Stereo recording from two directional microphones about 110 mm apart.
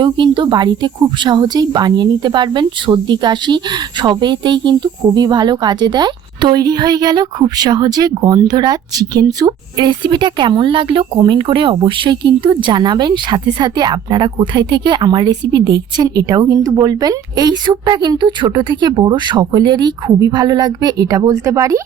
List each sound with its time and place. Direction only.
0.0 s speech: 45° right (ahead or behind)
16.0 s speech: 35° right (ahead or behind)